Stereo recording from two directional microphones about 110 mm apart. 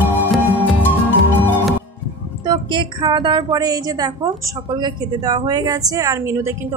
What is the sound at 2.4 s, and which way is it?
A woman's voice, 45° right (ahead or behind).